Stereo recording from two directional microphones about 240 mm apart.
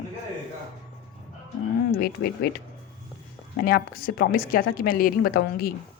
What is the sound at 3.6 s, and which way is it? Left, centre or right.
A woman's voice, left.